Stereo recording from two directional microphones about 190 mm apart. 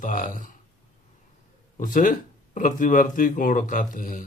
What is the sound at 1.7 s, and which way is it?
Speech, 45° left (ahead or behind).